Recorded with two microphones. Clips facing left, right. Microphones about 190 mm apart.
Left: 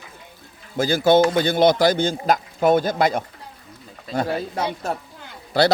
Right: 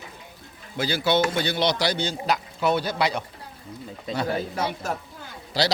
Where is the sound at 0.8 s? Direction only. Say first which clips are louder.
Left 7 dB; 45° left (ahead or behind).